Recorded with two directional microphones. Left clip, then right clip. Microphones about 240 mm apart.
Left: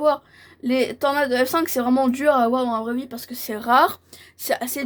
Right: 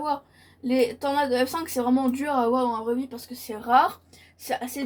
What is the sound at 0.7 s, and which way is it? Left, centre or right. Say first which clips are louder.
Speech: left 3 dB; left.